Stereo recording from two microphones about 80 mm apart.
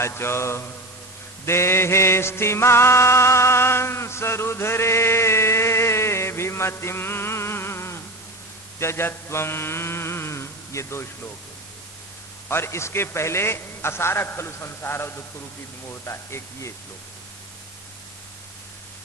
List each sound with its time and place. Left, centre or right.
0.0 s a man's voice: left
1.5 s music: left
8.8 s mantra: left
12.5 s a man's voice: left